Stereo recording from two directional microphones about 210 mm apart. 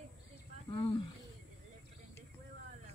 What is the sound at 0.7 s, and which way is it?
Speech, 25° left (ahead or behind).